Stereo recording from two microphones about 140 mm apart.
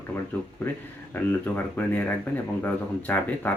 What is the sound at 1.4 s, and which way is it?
Speech, 15° left (ahead or behind).